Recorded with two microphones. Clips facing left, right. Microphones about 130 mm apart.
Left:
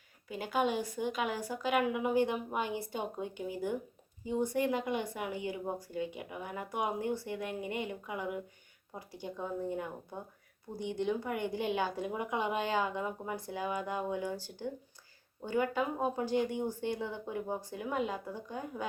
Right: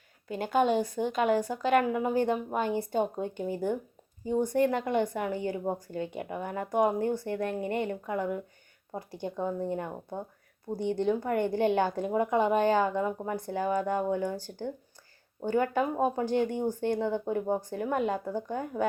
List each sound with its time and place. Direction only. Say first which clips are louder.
0.3 s speech: right 6 dB; 50° right (ahead or behind)